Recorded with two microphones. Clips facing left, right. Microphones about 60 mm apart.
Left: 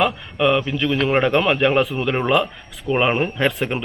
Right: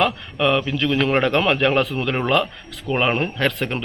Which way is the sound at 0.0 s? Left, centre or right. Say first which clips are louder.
Left 1 dB; centre.